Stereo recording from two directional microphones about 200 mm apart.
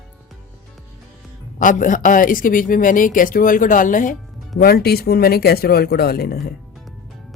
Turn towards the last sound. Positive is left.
turn(degrees=50)  # may be behind; listen again after turning